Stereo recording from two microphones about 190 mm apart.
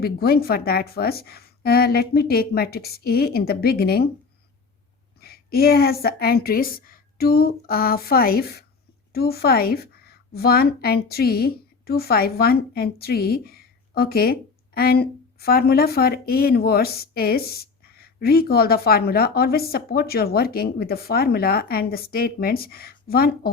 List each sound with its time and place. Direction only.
0.0 s a woman's voice: 55° left (ahead or behind)
5.2 s a woman's voice: 55° left (ahead or behind)